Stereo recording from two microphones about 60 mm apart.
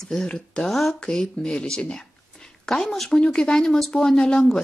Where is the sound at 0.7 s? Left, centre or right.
Centre.